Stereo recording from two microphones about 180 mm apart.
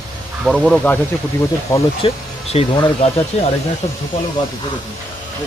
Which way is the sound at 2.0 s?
35° left (ahead or behind).